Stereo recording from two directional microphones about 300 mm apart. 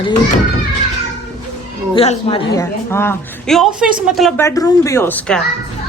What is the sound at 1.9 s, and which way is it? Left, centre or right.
Speech, centre.